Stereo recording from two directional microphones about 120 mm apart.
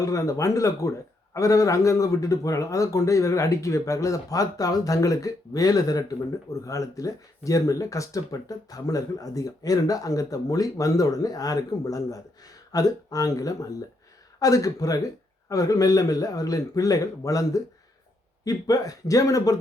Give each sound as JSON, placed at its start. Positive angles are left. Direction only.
{"t": 0.0, "sound": "a man's voice", "side_deg": 25}